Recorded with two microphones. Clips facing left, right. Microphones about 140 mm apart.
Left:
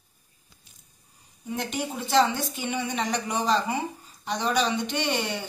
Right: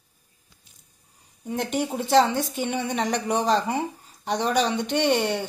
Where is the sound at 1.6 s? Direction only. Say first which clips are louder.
Right 5 dB; 60° right (ahead or behind).